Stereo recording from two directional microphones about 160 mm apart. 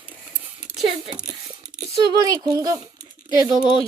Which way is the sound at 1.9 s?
25° right (ahead or behind).